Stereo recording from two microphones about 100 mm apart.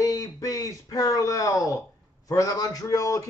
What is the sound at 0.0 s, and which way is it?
Speech, 35° left (ahead or behind).